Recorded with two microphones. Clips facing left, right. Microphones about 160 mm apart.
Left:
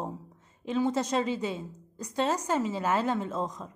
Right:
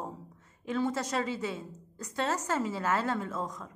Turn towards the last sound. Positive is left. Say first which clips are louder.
# left 3 dB
turn(degrees=20)  # may be behind; listen again after turning